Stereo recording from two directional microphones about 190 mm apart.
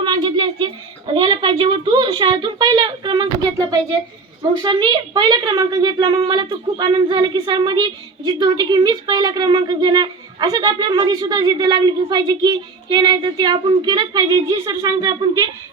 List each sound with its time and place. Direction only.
0.0 s a child's voice: 25° right (ahead or behind)